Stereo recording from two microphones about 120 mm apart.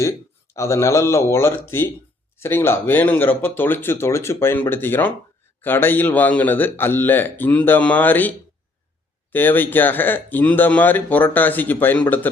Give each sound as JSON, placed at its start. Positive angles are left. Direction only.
{"t": 0.5, "sound": "speech", "side_deg": 25}
{"t": 9.3, "sound": "speech", "side_deg": 15}